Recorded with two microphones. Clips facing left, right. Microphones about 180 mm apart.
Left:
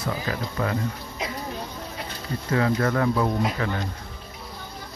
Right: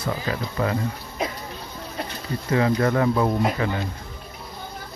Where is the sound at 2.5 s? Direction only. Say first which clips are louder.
Right 2 dB; 20° right (ahead or behind).